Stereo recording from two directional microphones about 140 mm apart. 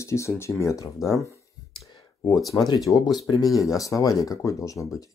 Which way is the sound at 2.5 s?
25° left (ahead or behind).